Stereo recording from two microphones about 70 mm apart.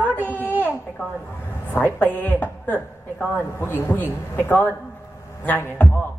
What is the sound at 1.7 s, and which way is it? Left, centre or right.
A woman's voice, left.